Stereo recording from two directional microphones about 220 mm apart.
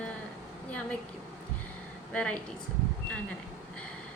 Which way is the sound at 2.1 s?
5° left (ahead or behind).